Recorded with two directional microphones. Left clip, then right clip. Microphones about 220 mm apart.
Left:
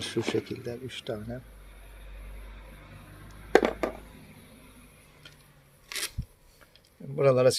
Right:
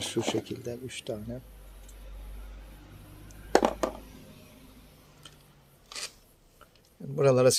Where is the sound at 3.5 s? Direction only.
25° right (ahead or behind).